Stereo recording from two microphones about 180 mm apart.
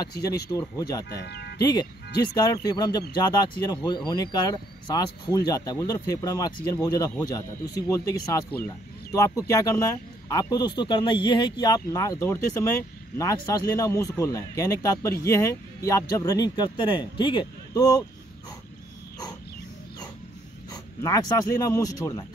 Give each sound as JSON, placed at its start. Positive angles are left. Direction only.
{"t": 0.5, "sound": "speech", "side_deg": 15}
{"t": 1.1, "sound": "speech", "side_deg": 65}
{"t": 1.6, "sound": "speech", "side_deg": 20}
{"t": 21.0, "sound": "speech", "side_deg": 20}